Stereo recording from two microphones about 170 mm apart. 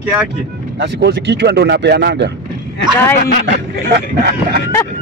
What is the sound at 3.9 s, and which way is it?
Speech, 70° right (ahead or behind).